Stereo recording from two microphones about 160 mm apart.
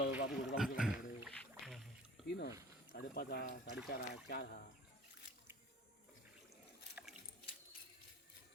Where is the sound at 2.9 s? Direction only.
70° left (ahead or behind).